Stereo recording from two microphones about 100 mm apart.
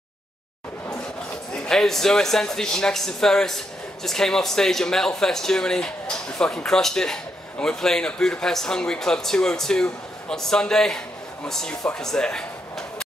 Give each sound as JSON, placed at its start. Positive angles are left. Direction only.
{"t": 1.5, "sound": "speech", "side_deg": 5}